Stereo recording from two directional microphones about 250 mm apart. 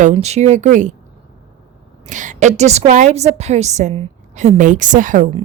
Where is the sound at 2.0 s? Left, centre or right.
Right.